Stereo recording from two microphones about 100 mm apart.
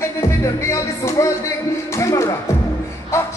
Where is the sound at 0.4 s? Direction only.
30° left (ahead or behind).